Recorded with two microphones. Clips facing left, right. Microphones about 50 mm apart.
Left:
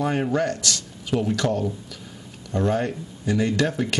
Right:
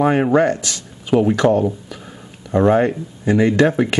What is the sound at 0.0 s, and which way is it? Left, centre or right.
Speech, right.